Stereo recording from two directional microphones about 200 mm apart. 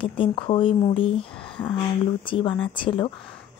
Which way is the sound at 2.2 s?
25° left (ahead or behind).